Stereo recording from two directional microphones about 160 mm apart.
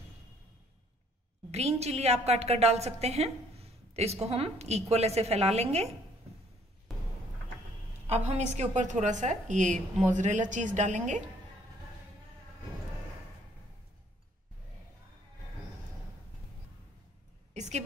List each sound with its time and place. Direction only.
1.5 s a woman's voice: 40° right (ahead or behind)
6.9 s a sound: centre (ahead or behind)
8.1 s a woman's voice: 45° right (ahead or behind)
17.6 s a woman's voice: 45° right (ahead or behind)